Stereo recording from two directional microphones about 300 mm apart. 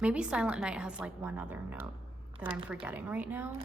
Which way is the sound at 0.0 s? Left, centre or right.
Centre.